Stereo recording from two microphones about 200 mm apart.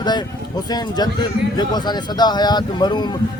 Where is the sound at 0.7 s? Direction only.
20° left (ahead or behind).